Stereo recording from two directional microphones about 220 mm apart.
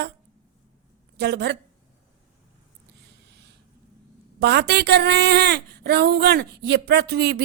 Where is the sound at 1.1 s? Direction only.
50° right (ahead or behind).